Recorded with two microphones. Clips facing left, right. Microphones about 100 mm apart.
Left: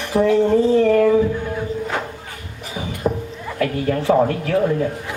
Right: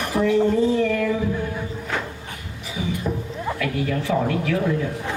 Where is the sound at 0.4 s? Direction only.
40° left (ahead or behind).